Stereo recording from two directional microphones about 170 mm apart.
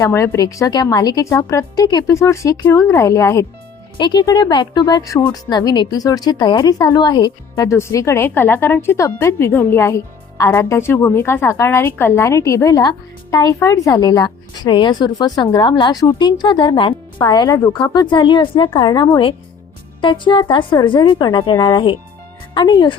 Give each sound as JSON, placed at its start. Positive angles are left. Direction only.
{"t": 0.1, "sound": "a woman's voice", "side_deg": 20}
{"t": 17.9, "sound": "speech", "side_deg": 30}